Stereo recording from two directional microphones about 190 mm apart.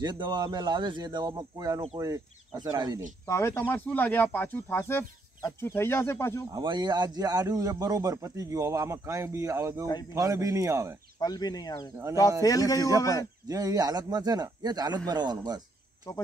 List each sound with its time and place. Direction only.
0.0 s speech: 20° right (ahead or behind)
3.3 s speech: 15° left (ahead or behind)
6.5 s speech: 25° right (ahead or behind)
11.1 s speech: 20° left (ahead or behind)
13.5 s speech: 20° right (ahead or behind)